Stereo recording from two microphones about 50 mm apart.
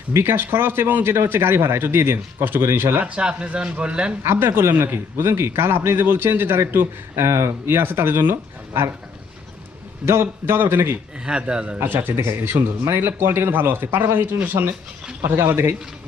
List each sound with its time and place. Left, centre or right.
0.1 s speech: right
1.0 s speech: right
3.0 s speech: right
4.4 s speech: right
10.1 s speech: right
11.3 s speech: centre
11.8 s speech: right
15.2 s speech: right